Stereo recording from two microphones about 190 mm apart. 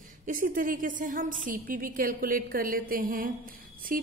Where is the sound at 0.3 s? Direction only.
45° right (ahead or behind).